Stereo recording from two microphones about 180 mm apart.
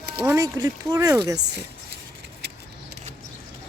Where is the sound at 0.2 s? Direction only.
15° right (ahead or behind).